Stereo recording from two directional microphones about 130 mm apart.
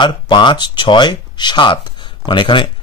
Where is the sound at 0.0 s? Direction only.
35° left (ahead or behind).